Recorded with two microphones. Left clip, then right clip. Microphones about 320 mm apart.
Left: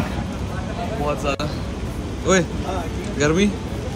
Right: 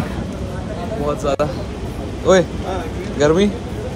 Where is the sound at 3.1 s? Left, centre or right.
Centre.